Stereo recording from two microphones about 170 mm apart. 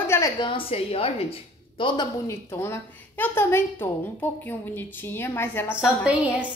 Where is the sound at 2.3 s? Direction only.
15° left (ahead or behind).